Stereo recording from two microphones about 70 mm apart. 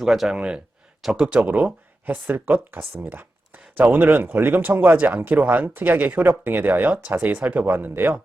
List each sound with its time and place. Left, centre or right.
0.0 s speech: centre
0.3 s speech: centre